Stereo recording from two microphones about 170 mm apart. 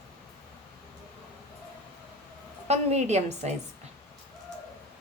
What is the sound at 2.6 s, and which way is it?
Speech, 40° right (ahead or behind).